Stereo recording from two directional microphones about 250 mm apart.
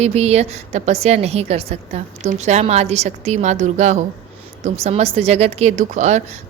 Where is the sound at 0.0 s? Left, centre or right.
Right.